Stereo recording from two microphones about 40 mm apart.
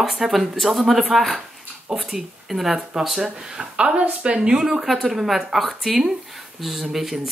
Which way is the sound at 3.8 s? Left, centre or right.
Right.